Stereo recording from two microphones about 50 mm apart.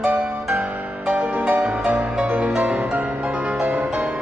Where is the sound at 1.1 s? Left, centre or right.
Right.